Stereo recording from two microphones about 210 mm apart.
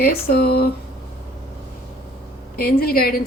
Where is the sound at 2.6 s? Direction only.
45° left (ahead or behind).